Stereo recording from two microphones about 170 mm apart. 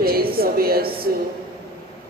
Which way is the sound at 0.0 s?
60° right (ahead or behind).